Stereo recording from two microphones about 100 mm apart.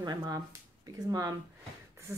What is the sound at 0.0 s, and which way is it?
Speech, 40° right (ahead or behind).